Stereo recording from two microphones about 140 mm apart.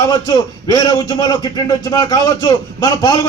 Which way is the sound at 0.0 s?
25° left (ahead or behind).